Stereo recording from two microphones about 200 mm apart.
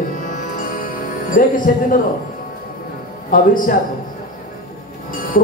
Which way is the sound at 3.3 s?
45° left (ahead or behind).